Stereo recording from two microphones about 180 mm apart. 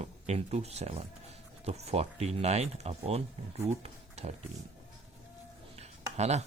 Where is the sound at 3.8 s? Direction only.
35° right (ahead or behind).